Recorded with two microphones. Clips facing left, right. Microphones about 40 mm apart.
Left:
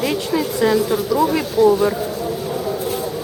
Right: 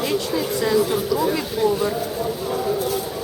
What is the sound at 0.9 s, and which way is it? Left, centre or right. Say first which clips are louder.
Speech: left 3 dB; centre.